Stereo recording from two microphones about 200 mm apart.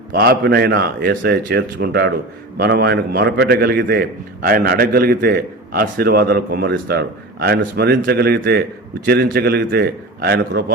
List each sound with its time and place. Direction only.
0.1 s a man's voice: 50° right (ahead or behind)